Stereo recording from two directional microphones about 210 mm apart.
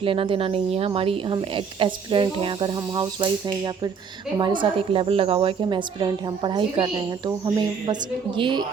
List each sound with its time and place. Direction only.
0.0 s speech: 25° right (ahead or behind)